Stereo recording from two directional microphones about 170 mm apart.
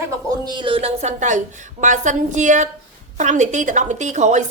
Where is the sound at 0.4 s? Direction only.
30° right (ahead or behind).